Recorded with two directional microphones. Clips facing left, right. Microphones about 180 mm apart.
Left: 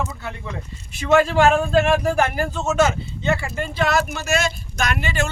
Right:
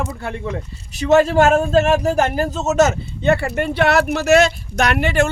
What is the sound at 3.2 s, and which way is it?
Speech, 60° right (ahead or behind).